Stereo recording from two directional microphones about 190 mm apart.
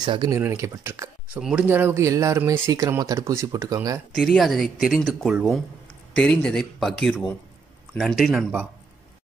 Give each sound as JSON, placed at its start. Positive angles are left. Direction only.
{"t": 0.0, "sound": "speech", "side_deg": -25}
{"t": 0.4, "sound": "speech", "side_deg": -10}
{"t": 4.1, "sound": "speech", "side_deg": 0}